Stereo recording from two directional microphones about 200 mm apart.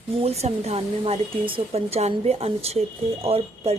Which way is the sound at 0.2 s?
30° right (ahead or behind).